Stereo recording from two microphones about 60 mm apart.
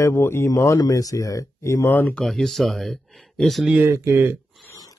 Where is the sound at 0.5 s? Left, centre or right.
Left.